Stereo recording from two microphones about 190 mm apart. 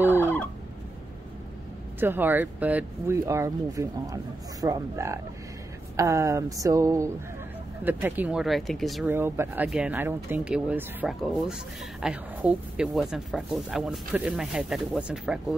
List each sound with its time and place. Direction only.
0.0 s fowl: 10° right (ahead or behind)
2.0 s speech: 10° right (ahead or behind)
9.1 s speech: 10° right (ahead or behind)